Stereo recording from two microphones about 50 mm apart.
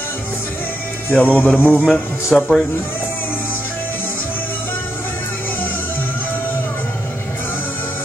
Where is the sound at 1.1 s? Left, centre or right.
Left.